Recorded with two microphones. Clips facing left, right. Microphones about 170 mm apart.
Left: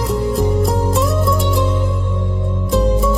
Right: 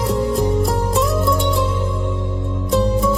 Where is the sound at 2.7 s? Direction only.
Centre (ahead or behind).